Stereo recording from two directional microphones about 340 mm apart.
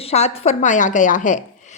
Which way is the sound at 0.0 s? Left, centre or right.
Centre.